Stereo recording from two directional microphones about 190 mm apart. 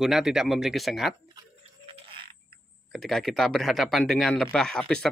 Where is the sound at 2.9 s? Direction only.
Centre (ahead or behind).